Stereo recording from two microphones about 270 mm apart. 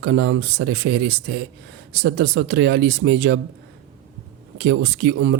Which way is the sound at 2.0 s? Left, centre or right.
Right.